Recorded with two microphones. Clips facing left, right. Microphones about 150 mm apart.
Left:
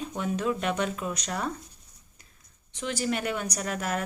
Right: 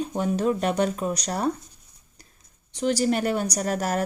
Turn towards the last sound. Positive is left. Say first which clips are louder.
# right 5 dB
turn(degrees=-40)  # may be behind; listen again after turning